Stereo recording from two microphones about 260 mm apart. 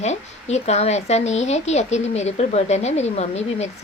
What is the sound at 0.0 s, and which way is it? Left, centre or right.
Speech, left.